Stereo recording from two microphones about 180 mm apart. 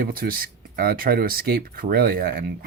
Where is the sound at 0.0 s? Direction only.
55° right (ahead or behind).